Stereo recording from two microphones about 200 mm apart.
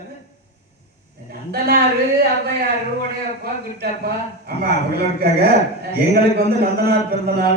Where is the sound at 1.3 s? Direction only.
55° right (ahead or behind).